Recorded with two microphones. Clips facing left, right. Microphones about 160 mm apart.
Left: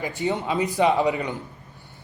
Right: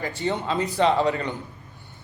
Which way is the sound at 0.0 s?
15° left (ahead or behind).